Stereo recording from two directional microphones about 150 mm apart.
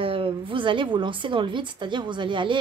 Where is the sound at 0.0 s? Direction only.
35° right (ahead or behind).